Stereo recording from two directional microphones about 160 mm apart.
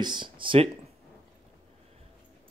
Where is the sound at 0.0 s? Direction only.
30° right (ahead or behind).